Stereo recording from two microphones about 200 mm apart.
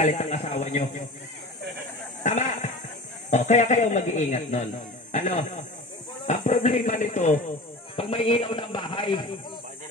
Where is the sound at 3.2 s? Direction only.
35° left (ahead or behind).